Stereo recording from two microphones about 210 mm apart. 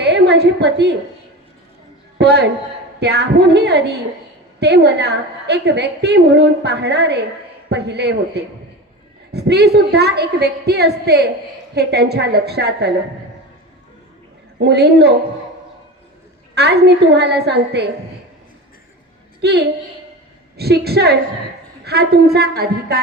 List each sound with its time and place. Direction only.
0.0 s a woman's voice: 55° right (ahead or behind)
2.1 s a man's voice: 55° right (ahead or behind)
14.6 s a woman's voice: 50° right (ahead or behind)
16.6 s a woman's voice: 55° right (ahead or behind)
19.4 s a woman's voice: 50° right (ahead or behind)